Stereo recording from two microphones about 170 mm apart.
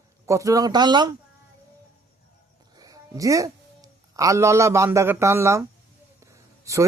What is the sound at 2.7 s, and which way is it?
A woman's voice, 20° right (ahead or behind).